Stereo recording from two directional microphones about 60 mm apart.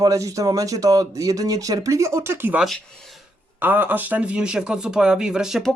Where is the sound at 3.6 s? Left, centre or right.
Right; by 5.6 s centre.